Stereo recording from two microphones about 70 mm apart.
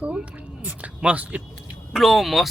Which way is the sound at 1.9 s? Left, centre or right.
Centre.